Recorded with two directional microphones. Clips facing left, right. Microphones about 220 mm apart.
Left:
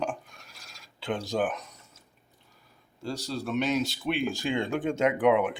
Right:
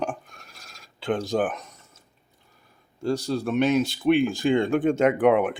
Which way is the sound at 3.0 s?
50° right (ahead or behind).